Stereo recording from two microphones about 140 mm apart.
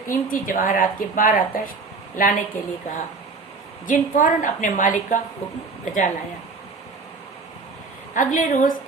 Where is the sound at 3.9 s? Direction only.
70° left (ahead or behind).